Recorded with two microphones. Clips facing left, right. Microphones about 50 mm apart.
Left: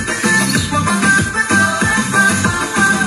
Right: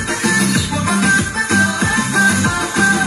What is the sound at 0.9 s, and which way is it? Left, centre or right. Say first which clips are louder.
Music: left 1 dB; centre.